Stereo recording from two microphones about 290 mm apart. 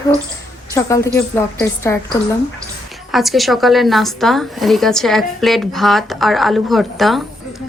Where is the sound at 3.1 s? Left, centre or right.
Centre.